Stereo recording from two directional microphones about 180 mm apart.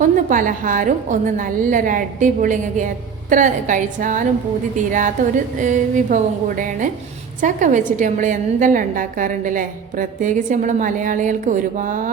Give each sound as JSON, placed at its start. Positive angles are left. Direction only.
{"t": 0.0, "sound": "a woman's voice", "side_deg": -45}